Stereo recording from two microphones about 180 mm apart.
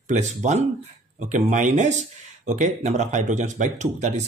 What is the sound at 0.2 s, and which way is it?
Speech, 40° right (ahead or behind).